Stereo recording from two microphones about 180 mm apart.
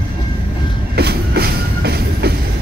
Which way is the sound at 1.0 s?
65° right (ahead or behind).